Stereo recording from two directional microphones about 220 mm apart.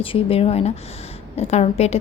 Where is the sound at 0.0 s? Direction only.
25° left (ahead or behind).